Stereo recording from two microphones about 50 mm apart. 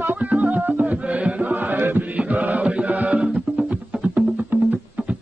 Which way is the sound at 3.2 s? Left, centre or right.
Right.